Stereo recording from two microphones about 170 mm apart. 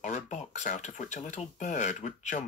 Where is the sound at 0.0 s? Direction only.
45° left (ahead or behind).